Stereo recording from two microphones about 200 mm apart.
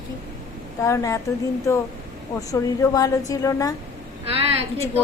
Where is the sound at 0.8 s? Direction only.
15° left (ahead or behind).